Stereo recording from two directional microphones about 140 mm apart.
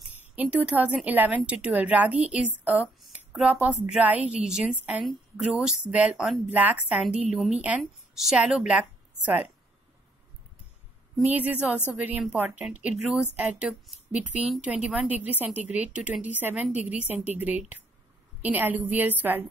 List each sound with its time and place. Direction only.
0.2 s a woman's voice: 10° right (ahead or behind)
11.3 s a woman's voice: 10° right (ahead or behind)